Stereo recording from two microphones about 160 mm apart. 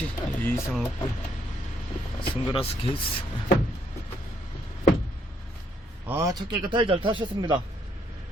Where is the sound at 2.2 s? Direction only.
35° left (ahead or behind).